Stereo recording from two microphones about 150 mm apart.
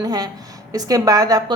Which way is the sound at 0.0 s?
25° right (ahead or behind).